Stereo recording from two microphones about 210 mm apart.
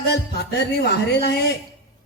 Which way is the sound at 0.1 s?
55° left (ahead or behind).